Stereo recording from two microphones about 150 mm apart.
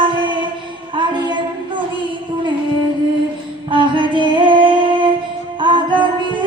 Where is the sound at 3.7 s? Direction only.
35° right (ahead or behind).